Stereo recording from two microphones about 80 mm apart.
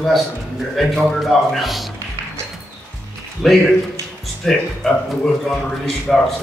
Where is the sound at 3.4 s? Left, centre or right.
Centre.